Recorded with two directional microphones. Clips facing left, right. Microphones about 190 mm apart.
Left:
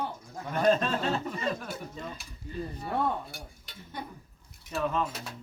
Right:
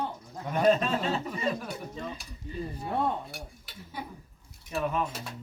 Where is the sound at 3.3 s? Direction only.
5° right (ahead or behind).